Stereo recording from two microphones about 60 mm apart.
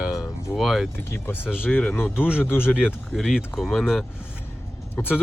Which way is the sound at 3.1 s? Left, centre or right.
Centre.